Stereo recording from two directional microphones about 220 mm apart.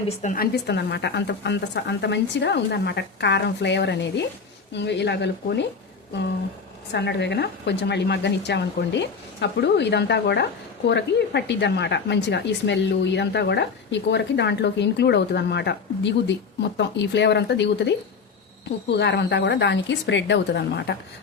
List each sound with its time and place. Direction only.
0.2 s a woman's voice: 35° left (ahead or behind)
0.5 s a woman's voice: 50° left (ahead or behind)
6.9 s a woman's voice: 50° left (ahead or behind)